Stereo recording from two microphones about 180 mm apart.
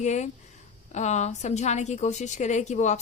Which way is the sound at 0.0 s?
40° left (ahead or behind).